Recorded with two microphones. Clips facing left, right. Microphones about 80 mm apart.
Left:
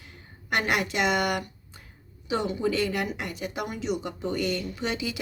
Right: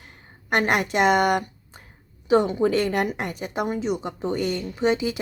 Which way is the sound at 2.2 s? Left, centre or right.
Right.